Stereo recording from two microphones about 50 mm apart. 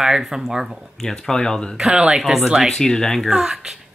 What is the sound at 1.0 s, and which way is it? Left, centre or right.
Speech, centre.